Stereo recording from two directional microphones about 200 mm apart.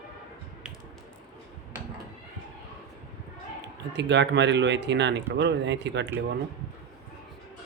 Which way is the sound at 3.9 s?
60° right (ahead or behind).